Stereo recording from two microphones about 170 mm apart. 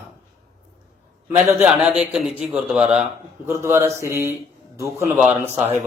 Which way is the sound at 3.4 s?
15° right (ahead or behind).